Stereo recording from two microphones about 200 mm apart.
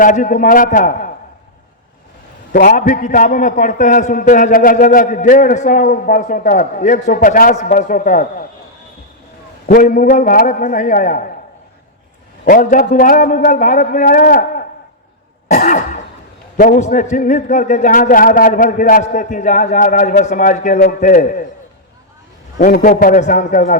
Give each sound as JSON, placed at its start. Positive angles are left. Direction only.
{"t": 0.0, "sound": "a man's voice", "side_deg": 40}
{"t": 2.5, "sound": "a man's voice", "side_deg": 45}
{"t": 9.6, "sound": "a man's voice", "side_deg": 40}
{"t": 12.5, "sound": "a man's voice", "side_deg": 45}
{"t": 15.4, "sound": "cough", "side_deg": 40}
{"t": 16.6, "sound": "a man's voice", "side_deg": 40}
{"t": 22.6, "sound": "a man's voice", "side_deg": 45}